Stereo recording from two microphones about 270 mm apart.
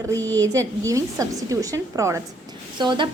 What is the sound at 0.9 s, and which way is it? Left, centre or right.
A woman's voice, centre.